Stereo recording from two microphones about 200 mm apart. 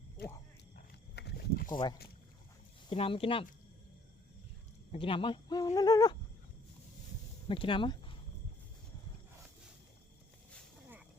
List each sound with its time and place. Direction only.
1.1 s a sound: 55° left (ahead or behind)
2.9 s speech: 30° left (ahead or behind)
4.9 s speech: 25° left (ahead or behind)
7.4 s speech: 25° left (ahead or behind)